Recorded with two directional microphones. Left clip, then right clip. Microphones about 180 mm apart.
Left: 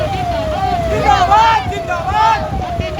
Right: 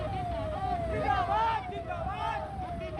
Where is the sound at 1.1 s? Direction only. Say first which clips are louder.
Left 19 dB; 60° left (ahead or behind).